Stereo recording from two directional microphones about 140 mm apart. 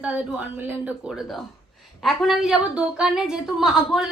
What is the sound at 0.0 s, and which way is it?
A woman's voice, 10° right (ahead or behind).